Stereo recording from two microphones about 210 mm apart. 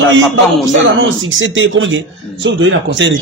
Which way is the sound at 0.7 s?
65° right (ahead or behind).